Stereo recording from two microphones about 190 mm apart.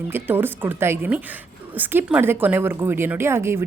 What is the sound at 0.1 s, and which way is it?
Speech, 10° right (ahead or behind).